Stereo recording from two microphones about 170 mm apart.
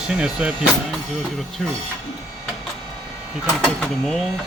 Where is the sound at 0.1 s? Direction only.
5° right (ahead or behind).